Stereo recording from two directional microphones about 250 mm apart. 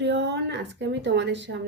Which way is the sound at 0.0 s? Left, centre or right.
Right.